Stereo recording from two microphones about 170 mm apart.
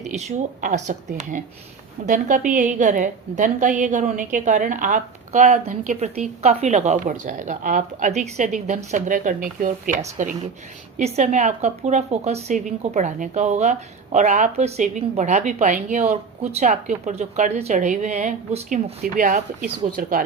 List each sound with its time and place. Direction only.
0.0 s speech: 40° right (ahead or behind)